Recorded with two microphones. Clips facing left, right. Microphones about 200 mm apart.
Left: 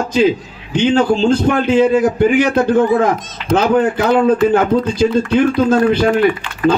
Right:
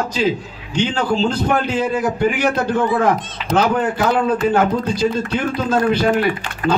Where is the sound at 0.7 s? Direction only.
50° left (ahead or behind).